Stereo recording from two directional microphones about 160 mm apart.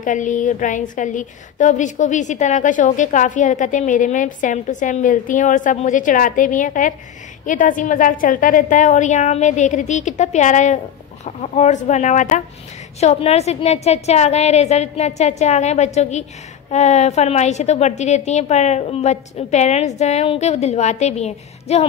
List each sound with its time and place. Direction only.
0.0 s a woman's voice: 50° left (ahead or behind)